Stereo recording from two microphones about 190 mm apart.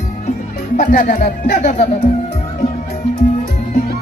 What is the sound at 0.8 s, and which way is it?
Speech, 40° left (ahead or behind).